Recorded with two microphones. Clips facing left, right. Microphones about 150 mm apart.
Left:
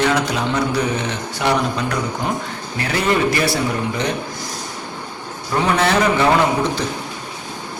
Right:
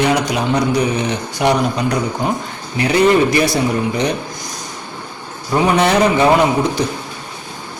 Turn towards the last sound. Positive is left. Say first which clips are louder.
# right 3 dB
turn(degrees=-15)  # may be behind; listen again after turning